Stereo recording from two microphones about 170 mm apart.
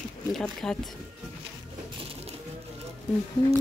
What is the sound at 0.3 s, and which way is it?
Speech, 5° left (ahead or behind).